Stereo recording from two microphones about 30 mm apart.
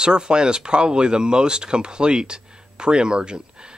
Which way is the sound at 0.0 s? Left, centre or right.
Right.